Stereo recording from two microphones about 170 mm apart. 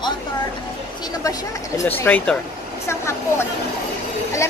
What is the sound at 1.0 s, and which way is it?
Speech, 20° left (ahead or behind).